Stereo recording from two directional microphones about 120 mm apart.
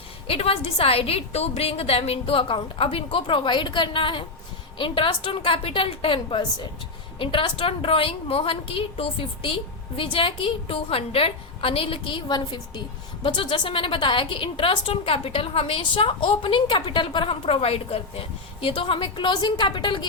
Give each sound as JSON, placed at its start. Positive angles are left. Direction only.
{"t": 0.3, "sound": "a woman's voice", "side_deg": 55}